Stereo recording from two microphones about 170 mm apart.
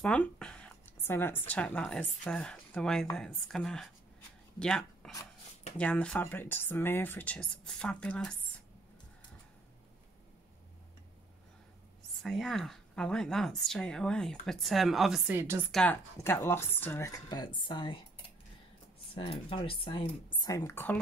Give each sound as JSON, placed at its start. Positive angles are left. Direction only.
{"t": 0.0, "sound": "speech", "side_deg": 5}
{"t": 12.2, "sound": "speech", "side_deg": 0}
{"t": 15.7, "sound": "speech", "side_deg": 5}
{"t": 19.5, "sound": "speech", "side_deg": 30}